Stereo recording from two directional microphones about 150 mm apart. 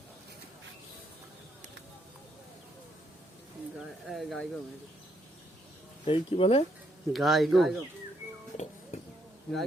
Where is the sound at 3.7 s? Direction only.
Centre (ahead or behind).